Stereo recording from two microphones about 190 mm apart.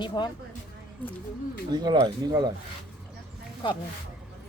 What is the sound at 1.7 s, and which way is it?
Speech, 20° right (ahead or behind).